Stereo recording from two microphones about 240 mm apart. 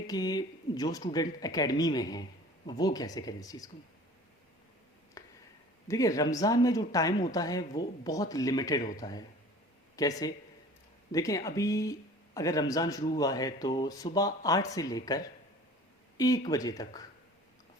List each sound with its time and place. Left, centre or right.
0.1 s speech: centre
5.2 s a sound: centre
5.9 s speech: centre